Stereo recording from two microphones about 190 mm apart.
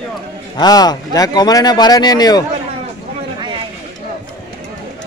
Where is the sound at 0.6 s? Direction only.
20° left (ahead or behind).